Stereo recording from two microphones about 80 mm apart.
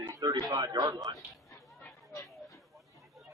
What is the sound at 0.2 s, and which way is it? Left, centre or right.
Speech, right.